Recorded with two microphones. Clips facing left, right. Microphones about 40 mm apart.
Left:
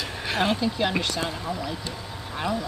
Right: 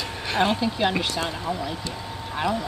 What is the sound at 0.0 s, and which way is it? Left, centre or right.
Speech, centre.